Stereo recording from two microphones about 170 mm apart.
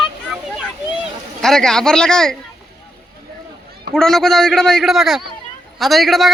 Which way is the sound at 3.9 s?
5° left (ahead or behind).